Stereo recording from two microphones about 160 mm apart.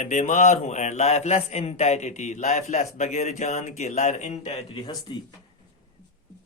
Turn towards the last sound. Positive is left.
turn(degrees=25)  # may be behind; listen again after turning